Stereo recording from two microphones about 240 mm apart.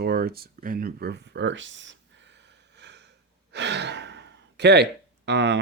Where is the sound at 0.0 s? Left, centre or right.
Right.